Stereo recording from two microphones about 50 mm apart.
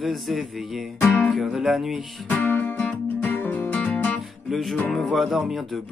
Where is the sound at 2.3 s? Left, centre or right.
Left.